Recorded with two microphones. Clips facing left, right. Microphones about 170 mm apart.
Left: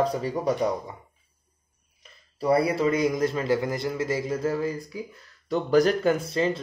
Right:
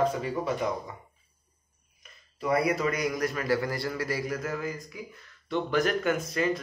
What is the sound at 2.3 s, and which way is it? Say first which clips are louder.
A man's voice: left 4 dB; 35° left (ahead or behind).